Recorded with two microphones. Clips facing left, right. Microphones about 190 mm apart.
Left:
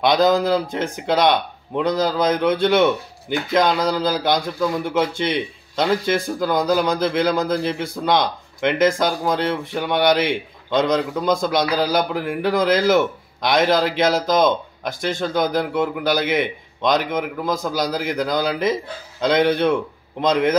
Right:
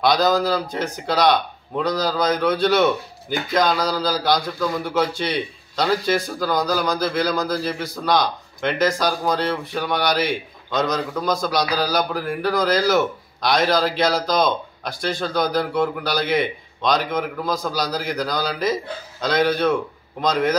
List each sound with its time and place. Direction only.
0.0 s speech: 25° left (ahead or behind)